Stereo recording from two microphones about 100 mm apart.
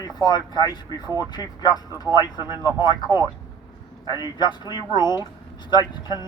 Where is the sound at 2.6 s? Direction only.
45° left (ahead or behind).